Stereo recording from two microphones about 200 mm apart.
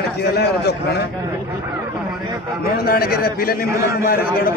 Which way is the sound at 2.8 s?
50° left (ahead or behind).